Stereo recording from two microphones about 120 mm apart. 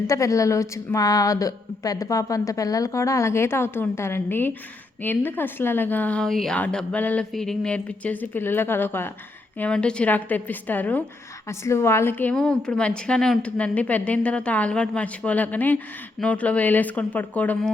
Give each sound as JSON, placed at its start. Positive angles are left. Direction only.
{"t": 0.1, "sound": "a woman's voice", "side_deg": 25}
{"t": 9.6, "sound": "a woman's voice", "side_deg": 10}